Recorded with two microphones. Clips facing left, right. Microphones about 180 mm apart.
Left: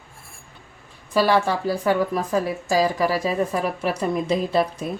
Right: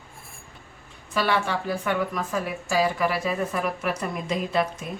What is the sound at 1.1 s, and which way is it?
Speech, 35° left (ahead or behind).